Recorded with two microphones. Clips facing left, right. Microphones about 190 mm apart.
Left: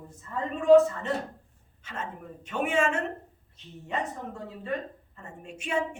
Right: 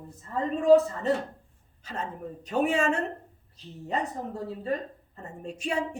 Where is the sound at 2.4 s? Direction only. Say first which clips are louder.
Right 2 dB; 35° right (ahead or behind).